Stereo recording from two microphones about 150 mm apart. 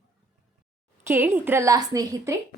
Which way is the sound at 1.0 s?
15° right (ahead or behind).